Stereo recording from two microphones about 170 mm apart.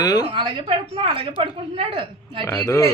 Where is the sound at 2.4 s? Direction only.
15° left (ahead or behind).